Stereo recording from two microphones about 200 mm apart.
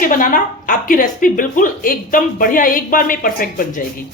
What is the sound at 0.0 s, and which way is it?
Speech, 45° left (ahead or behind).